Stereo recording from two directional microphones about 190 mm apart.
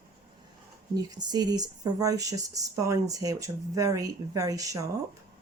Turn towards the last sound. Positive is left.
turn(degrees=-15)  # may be behind; listen again after turning